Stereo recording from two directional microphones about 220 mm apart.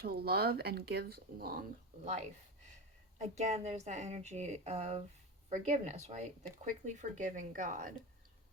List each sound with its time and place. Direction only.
0.0 s speech: 45° right (ahead or behind)
3.2 s a woman's voice: 30° right (ahead or behind)